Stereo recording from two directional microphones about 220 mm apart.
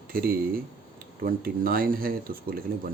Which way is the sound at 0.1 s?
40° right (ahead or behind).